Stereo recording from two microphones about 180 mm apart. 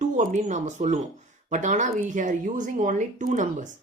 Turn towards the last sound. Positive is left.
turn(degrees=-45)  # may be behind; listen again after turning